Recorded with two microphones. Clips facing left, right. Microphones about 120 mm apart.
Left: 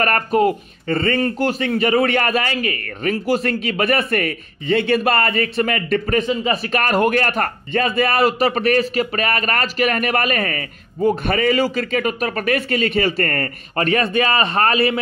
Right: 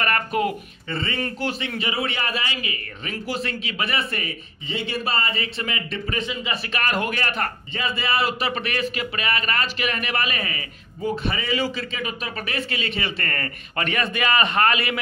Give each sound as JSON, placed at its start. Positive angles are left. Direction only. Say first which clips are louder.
{"t": 0.0, "sound": "a man's voice", "louder": "left 7 dB", "side_deg": 40}